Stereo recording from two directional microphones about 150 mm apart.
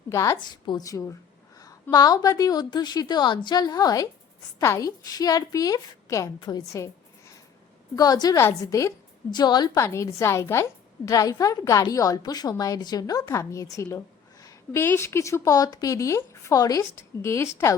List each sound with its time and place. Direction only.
0.1 s a woman's voice: 20° left (ahead or behind)
0.3 s a woman's voice: 30° left (ahead or behind)